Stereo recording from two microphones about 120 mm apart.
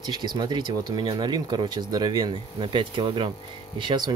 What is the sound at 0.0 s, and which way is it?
Speech, 35° right (ahead or behind).